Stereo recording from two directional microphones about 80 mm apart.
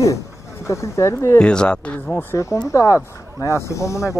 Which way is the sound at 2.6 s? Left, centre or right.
Left.